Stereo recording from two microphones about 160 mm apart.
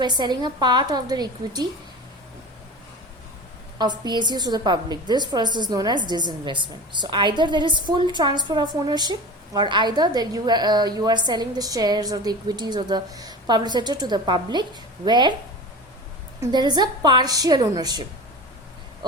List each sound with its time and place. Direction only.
0.0 s a woman's voice: 25° right (ahead or behind)
3.8 s a woman's voice: 25° right (ahead or behind)
16.5 s a woman's voice: 25° right (ahead or behind)